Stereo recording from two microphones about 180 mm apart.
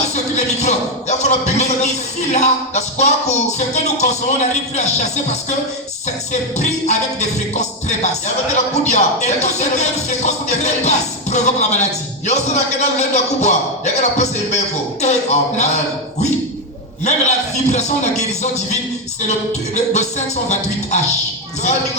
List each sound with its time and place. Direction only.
0.1 s a man's voice: 40° left (ahead or behind)
6.6 s speech: 40° left (ahead or behind)
17.0 s speech: 40° left (ahead or behind)
19.7 s speech: 40° left (ahead or behind)